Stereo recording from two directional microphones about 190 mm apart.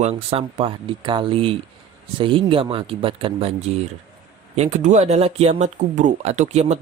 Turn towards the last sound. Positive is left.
turn(degrees=-35)  # may be behind; listen again after turning